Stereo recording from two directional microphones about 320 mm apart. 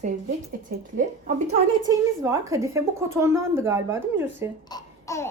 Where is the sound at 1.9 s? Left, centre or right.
Centre.